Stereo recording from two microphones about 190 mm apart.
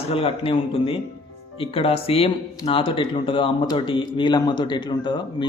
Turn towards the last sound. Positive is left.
turn(degrees=25)  # may be behind; listen again after turning